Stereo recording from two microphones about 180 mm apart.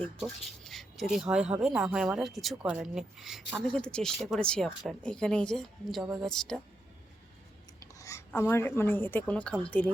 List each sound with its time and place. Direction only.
0.0 s speech: centre (ahead or behind)
7.8 s a sound: 20° left (ahead or behind)
8.3 s a woman's voice: 10° left (ahead or behind)